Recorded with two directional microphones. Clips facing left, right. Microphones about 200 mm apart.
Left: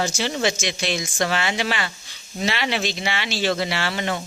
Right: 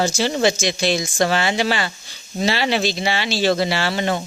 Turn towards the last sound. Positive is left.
turn(degrees=-35)  # may be behind; listen again after turning